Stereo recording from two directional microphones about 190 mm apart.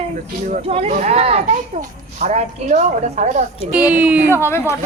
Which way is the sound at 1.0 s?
30° right (ahead or behind).